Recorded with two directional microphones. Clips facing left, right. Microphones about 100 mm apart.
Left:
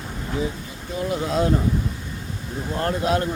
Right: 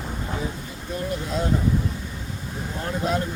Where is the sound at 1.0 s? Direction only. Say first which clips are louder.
Left 5 dB; 90° left.